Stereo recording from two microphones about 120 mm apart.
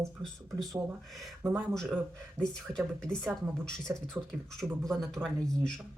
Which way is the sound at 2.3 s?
5° left (ahead or behind).